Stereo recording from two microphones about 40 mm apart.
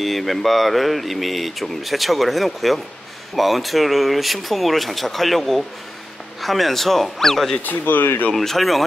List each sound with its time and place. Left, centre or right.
0.0 s speech: centre
7.6 s speech: left
8.4 s speech: centre